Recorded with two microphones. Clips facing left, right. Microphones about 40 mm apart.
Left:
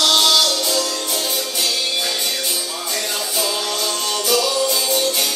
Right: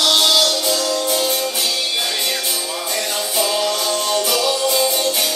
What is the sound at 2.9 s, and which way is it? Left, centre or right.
Music, centre.